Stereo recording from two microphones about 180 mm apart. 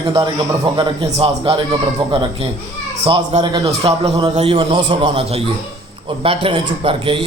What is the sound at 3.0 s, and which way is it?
A man's voice, 30° right (ahead or behind).